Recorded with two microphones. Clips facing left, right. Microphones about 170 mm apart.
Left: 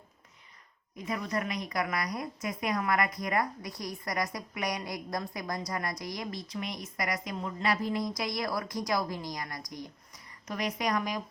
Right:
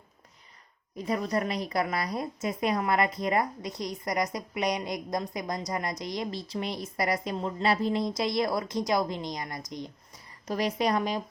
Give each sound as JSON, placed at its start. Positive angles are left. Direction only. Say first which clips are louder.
{"t": 0.9, "sound": "a woman's voice", "louder": "right 5 dB", "side_deg": -35}